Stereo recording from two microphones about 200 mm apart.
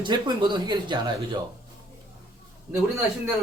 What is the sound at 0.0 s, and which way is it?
A man's voice, 20° right (ahead or behind).